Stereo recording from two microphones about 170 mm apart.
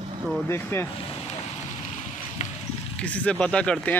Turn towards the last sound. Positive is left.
turn(degrees=5)  # may be behind; listen again after turning